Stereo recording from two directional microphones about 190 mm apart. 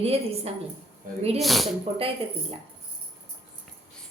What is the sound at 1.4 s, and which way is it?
Speech, centre (ahead or behind).